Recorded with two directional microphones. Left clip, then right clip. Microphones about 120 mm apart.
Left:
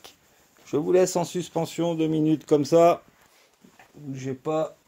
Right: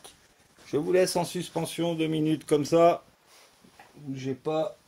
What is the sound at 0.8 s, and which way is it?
Speech, 85° left.